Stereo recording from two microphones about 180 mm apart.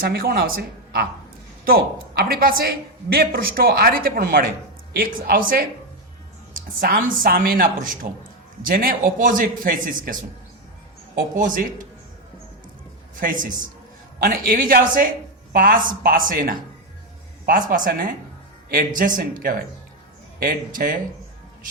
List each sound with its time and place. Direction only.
0.0 s a woman's voice: 55° right (ahead or behind)
11.1 s a man's voice: 50° right (ahead or behind)
13.1 s a man's voice: 50° right (ahead or behind)